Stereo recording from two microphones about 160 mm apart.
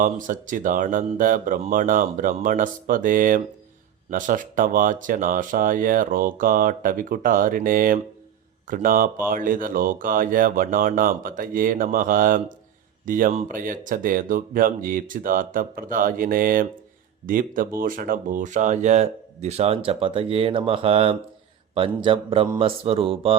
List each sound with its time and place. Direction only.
0.0 s speech: 55° right (ahead or behind); by 23.4 s 35° right (ahead or behind)